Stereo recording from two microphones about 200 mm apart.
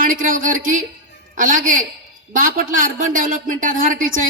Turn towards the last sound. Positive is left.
turn(degrees=-40)  # may be behind; listen again after turning